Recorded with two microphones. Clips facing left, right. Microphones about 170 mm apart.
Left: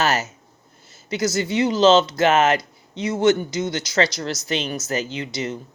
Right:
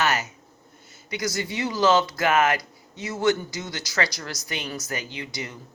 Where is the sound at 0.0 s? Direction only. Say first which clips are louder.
Left 3 dB; 30° left (ahead or behind).